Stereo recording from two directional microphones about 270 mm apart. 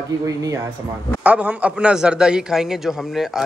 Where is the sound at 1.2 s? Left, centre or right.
Centre.